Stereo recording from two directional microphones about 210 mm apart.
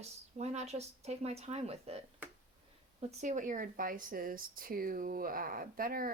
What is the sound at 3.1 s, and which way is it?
Speech, 35° right (ahead or behind).